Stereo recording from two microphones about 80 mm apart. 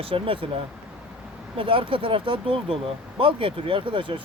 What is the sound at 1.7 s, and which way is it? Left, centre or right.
Speech, right.